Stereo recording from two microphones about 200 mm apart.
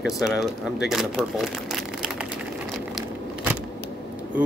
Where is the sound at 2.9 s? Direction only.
5° right (ahead or behind).